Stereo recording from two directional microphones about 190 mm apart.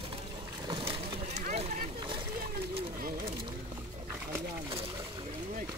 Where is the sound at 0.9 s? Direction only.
35° right (ahead or behind).